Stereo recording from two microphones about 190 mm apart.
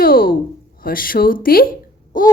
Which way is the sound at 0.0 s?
50° left (ahead or behind).